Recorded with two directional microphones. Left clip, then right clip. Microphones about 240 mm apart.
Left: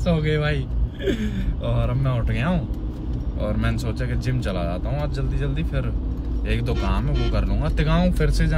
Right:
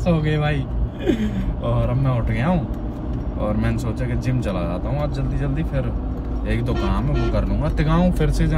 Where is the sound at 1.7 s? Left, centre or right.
Centre.